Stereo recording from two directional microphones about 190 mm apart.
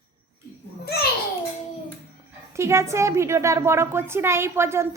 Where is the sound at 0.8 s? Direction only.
60° left (ahead or behind).